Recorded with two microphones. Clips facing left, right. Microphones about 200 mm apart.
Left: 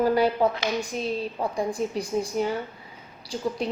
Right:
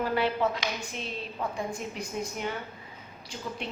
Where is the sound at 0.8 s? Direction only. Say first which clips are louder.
Left 9 dB; 40° left (ahead or behind).